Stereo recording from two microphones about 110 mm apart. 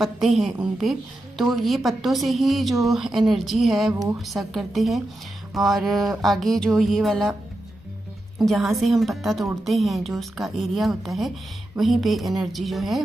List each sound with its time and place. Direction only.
0.0 s a woman's voice: centre (ahead or behind)
8.4 s a woman's voice: centre (ahead or behind)